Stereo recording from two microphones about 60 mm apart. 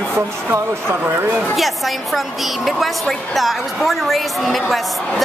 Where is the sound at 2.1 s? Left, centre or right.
Centre.